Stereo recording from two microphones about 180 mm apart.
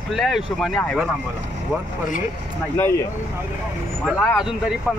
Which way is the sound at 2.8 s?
15° left (ahead or behind).